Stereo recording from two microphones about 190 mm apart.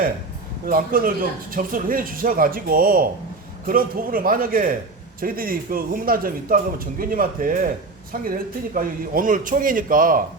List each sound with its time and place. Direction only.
0.6 s a man's voice: 50° right (ahead or behind)